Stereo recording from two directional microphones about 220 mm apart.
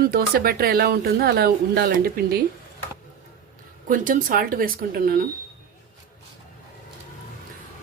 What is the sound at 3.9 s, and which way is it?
Speech, 35° right (ahead or behind).